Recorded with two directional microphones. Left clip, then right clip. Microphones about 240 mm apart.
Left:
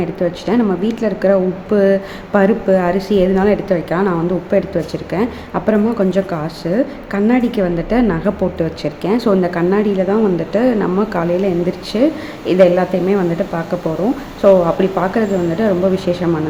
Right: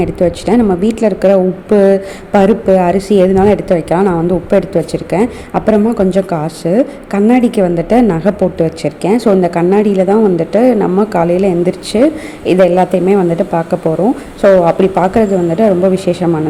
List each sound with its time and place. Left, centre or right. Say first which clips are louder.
0.0 s a woman's voice: right 6 dB; right